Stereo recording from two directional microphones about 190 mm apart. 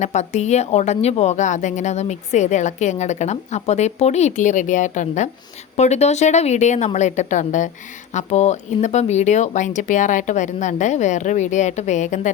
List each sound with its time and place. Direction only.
0.0 s a woman's voice: 35° left (ahead or behind)